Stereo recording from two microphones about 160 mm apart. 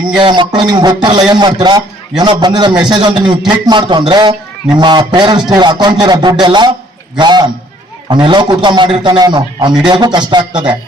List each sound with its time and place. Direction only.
0.2 s speech: 30° right (ahead or behind)